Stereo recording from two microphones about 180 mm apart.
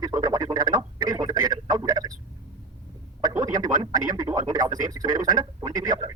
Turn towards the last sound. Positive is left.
turn(degrees=-25)  # may be behind; listen again after turning